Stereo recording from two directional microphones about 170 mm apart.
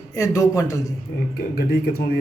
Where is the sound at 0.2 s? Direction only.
20° left (ahead or behind).